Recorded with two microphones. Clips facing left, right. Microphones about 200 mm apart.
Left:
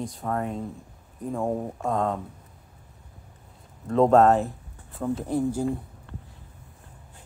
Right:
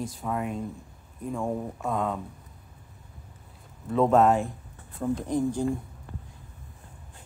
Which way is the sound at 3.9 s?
35° left (ahead or behind).